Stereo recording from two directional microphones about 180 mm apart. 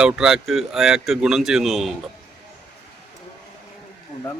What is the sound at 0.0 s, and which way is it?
Speech, 5° right (ahead or behind).